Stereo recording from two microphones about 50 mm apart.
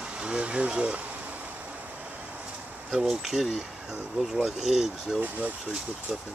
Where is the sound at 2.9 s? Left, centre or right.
Centre.